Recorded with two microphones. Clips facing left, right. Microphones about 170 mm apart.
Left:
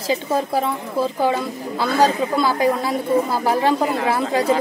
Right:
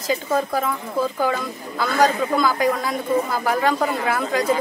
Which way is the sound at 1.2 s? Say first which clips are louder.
Left 3 dB; 30° left (ahead or behind).